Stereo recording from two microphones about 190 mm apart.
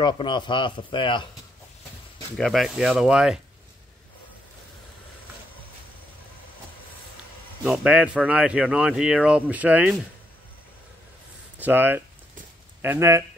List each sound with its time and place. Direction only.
0.0 s speech: 25° left (ahead or behind)
2.3 s speech: centre (ahead or behind)
7.6 s speech: 5° right (ahead or behind)
11.5 s speech: 10° right (ahead or behind)